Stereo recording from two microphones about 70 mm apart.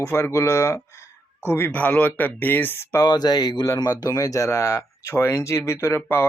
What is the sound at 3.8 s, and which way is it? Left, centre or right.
Speech, left.